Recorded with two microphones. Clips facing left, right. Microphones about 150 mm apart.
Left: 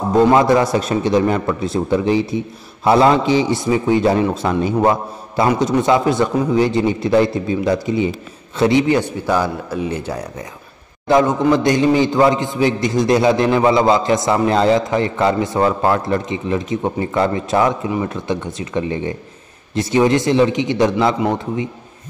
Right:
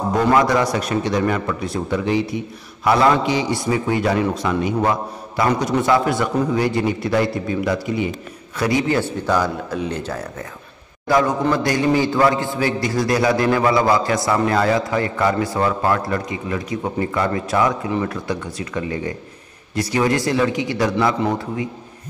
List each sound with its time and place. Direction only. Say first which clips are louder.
0.1 s a man's voice: left 5 dB; 25° left (ahead or behind)
11.1 s a man's voice: left 4 dB; 20° left (ahead or behind)